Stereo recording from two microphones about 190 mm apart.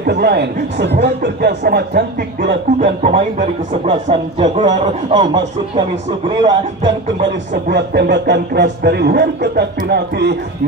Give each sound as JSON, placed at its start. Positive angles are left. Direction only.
{"t": 0.0, "sound": "a man's voice", "side_deg": -55}
{"t": 2.8, "sound": "a man's voice", "side_deg": -40}
{"t": 7.7, "sound": "a man's voice", "side_deg": -60}